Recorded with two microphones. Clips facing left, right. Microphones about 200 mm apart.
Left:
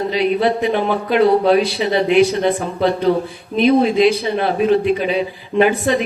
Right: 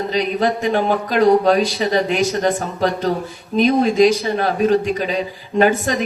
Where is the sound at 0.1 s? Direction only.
40° right (ahead or behind).